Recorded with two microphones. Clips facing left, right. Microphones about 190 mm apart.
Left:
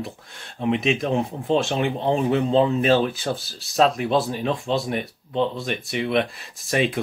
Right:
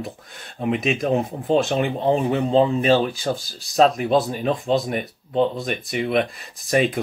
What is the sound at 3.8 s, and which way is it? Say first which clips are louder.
Speech: right 2 dB; 45° right (ahead or behind).